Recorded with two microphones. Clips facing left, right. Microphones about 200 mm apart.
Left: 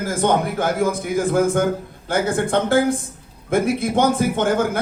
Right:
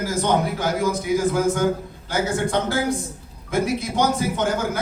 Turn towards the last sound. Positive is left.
turn(degrees=55)  # may be behind; listen again after turning